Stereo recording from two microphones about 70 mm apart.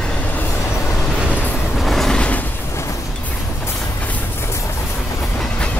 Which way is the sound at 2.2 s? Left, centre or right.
Left.